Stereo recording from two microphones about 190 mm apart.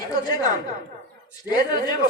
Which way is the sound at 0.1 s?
20° left (ahead or behind).